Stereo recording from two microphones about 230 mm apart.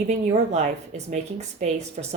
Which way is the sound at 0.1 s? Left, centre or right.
Right.